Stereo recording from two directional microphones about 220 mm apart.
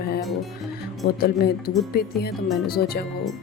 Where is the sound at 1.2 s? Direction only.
45° left (ahead or behind).